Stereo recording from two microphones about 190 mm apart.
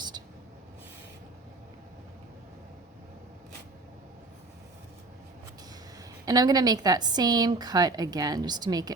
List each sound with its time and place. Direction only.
6.2 s a woman's voice: 20° right (ahead or behind)